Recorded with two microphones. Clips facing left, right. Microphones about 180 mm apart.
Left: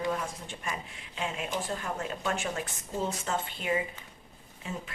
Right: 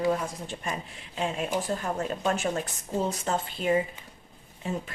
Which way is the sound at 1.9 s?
40° right (ahead or behind).